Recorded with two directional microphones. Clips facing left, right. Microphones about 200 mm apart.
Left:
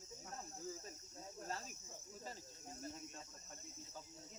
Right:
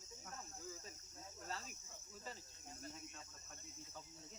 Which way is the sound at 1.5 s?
45° left (ahead or behind).